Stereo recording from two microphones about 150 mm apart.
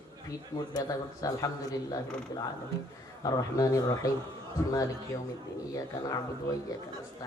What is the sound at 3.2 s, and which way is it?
Speech, 25° left (ahead or behind).